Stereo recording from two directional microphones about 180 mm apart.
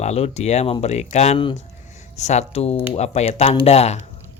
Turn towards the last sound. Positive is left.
turn(degrees=35)  # may be behind; listen again after turning